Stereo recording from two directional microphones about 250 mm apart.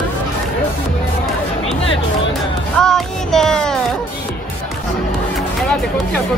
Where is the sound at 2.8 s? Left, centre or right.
Centre.